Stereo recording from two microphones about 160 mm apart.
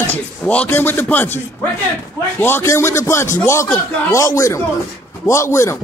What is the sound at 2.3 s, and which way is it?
A man's voice, 15° left (ahead or behind).